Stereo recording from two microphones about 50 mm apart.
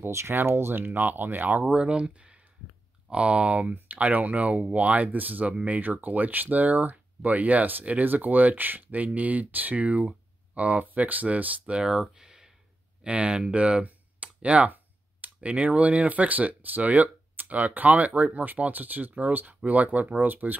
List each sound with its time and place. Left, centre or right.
0.1 s speech: right
0.4 s speech: right
1.6 s speech: centre
12.0 s a sound: centre
13.0 s speech: right